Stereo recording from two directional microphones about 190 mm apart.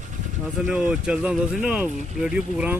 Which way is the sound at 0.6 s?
5° right (ahead or behind).